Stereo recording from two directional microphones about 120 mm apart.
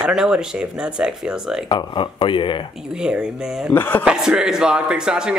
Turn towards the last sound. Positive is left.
turn(degrees=-5)  # may be behind; listen again after turning